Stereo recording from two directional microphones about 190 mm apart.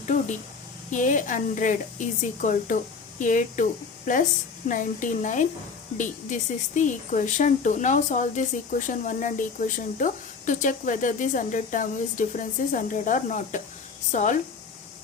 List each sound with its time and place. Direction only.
0.9 s a woman's voice: 40° left (ahead or behind)